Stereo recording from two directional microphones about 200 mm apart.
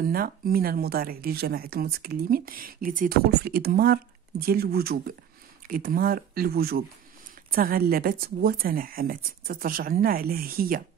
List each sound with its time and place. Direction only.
0.0 s speech: 50° right (ahead or behind)